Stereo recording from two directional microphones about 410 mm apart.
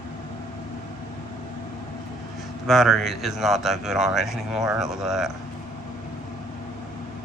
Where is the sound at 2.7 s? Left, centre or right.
Centre.